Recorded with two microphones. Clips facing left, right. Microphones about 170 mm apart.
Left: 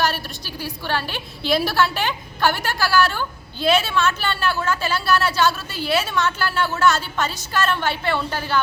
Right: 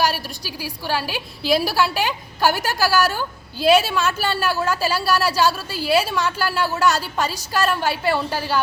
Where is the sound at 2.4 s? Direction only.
40° right (ahead or behind).